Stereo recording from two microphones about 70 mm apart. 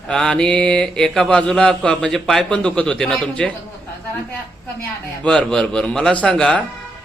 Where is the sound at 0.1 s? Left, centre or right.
Centre.